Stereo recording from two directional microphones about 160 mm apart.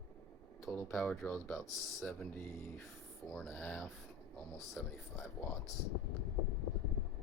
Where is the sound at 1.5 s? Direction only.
5° left (ahead or behind).